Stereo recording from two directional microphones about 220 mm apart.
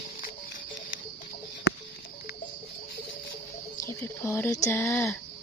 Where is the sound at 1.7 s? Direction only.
50° left (ahead or behind).